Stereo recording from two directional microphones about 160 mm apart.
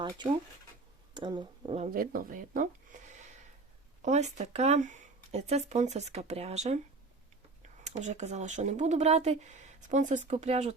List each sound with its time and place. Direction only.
1.1 s speech: 30° right (ahead or behind)
1.9 s speech: 65° right (ahead or behind); by 6.7 s 45° right (ahead or behind)
7.9 s speech: 45° right (ahead or behind)